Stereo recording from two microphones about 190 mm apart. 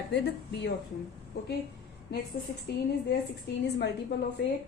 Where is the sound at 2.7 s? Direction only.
60° left (ahead or behind).